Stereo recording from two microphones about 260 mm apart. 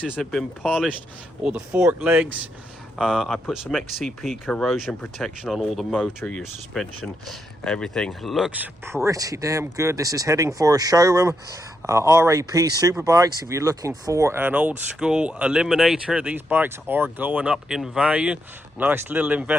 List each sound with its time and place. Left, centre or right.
0.0 s speech: centre